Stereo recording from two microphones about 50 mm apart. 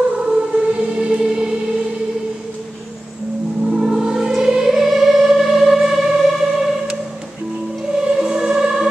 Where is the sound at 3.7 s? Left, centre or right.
Centre.